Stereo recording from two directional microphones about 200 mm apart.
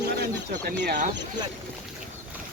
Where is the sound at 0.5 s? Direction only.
50° right (ahead or behind).